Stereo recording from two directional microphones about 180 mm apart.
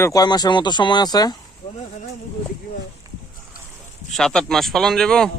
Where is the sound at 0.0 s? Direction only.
20° left (ahead or behind).